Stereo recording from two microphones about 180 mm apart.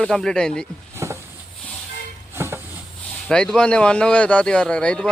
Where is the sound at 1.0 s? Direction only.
15° right (ahead or behind).